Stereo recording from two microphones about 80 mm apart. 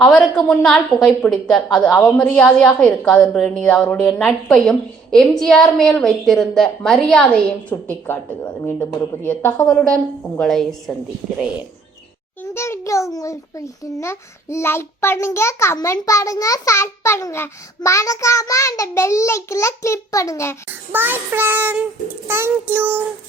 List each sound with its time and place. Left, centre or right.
0.0 s a woman's voice: centre
8.0 s speech: left
10.4 s a woman's voice: centre
12.5 s a child's voice: left
20.9 s child singing: right